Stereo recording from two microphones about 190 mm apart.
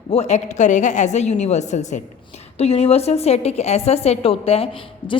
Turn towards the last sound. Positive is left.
turn(degrees=30)  # may be behind; listen again after turning